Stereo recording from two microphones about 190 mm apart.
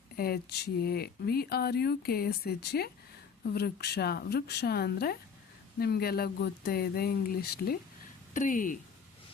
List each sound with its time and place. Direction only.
0.2 s speech: 55° left (ahead or behind)